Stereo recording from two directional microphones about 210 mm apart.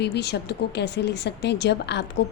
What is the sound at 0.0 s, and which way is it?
A woman's voice, 50° left (ahead or behind).